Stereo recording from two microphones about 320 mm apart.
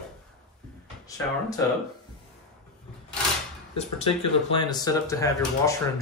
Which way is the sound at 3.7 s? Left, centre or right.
Centre.